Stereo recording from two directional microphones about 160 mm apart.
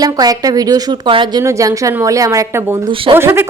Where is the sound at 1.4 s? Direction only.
20° right (ahead or behind).